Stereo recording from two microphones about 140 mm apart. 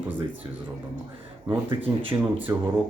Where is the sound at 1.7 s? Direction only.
40° right (ahead or behind).